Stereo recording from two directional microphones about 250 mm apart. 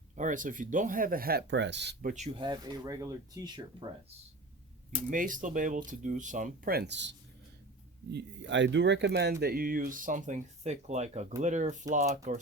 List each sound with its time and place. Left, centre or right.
0.2 s speech: right
5.1 s speech: right